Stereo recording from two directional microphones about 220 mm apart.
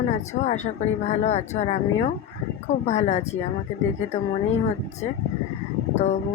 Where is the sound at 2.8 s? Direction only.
30° left (ahead or behind).